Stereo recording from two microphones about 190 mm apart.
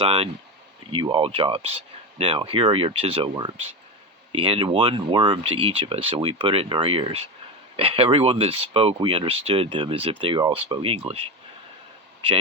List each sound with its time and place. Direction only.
0.0 s speech: 30° right (ahead or behind)